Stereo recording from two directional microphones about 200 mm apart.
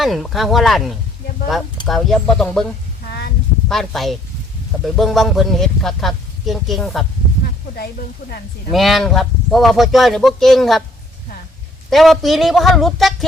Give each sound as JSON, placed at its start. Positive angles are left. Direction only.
{"t": 0.0, "sound": "speech", "side_deg": 0}
{"t": 3.1, "sound": "a sound", "side_deg": 55}
{"t": 3.7, "sound": "speech", "side_deg": 0}
{"t": 8.7, "sound": "speech", "side_deg": 0}
{"t": 11.9, "sound": "speech", "side_deg": 0}